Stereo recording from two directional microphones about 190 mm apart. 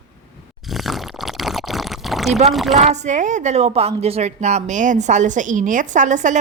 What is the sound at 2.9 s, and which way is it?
A woman's voice, 40° right (ahead or behind).